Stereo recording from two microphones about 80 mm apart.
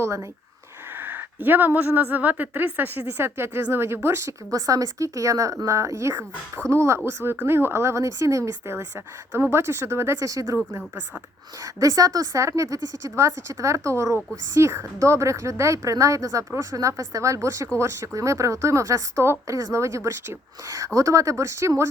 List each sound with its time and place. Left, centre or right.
0.0 s a woman's voice: right
0.9 s a woman's voice: right
4.5 s a woman's voice: right
11.6 s a woman's voice: right